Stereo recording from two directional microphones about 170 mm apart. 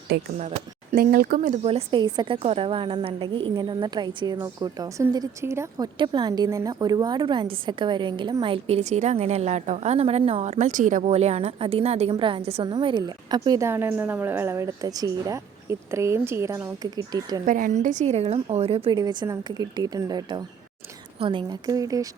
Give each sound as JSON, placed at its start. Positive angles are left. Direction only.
{"t": 0.1, "sound": "speech", "side_deg": -75}
{"t": 0.9, "sound": "speech", "side_deg": -60}
{"t": 1.6, "sound": "a woman's voice", "side_deg": -30}
{"t": 12.6, "sound": "a woman's voice", "side_deg": -25}
{"t": 17.4, "sound": "speech", "side_deg": -50}
{"t": 18.9, "sound": "a woman's voice", "side_deg": -25}